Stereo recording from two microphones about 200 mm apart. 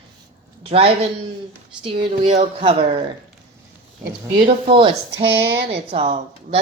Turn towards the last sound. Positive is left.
turn(degrees=-35)  # may be behind; listen again after turning